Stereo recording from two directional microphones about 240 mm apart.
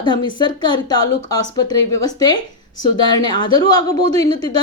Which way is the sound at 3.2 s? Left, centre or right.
Centre.